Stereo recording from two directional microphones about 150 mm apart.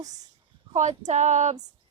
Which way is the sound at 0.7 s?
50° right (ahead or behind).